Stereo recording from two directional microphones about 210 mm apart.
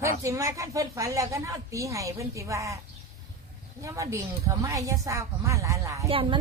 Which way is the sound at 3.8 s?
15° right (ahead or behind).